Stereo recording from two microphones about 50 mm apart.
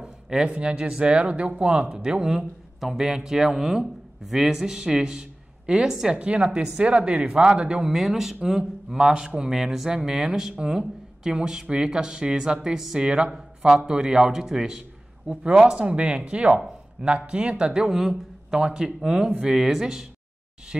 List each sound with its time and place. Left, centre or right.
0.0 s a sound: centre
0.5 s a man's voice: right
6.1 s speech: right
7.9 s speech: centre